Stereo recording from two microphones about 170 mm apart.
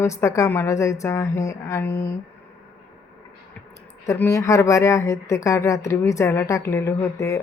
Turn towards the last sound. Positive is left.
turn(degrees=15)  # may be behind; listen again after turning